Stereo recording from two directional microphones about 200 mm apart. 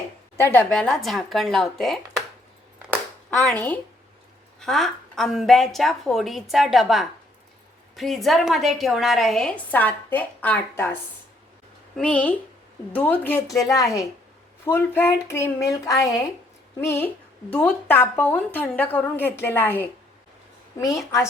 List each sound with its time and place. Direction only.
0.3 s a woman's voice: 10° left (ahead or behind)
3.2 s a woman's voice: 5° left (ahead or behind)
11.9 s a woman's voice: 5° left (ahead or behind)